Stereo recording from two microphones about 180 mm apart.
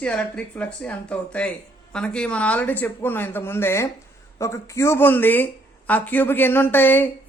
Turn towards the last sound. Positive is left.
turn(degrees=10)  # may be behind; listen again after turning